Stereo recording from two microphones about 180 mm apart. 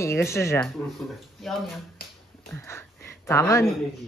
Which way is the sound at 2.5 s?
15° left (ahead or behind).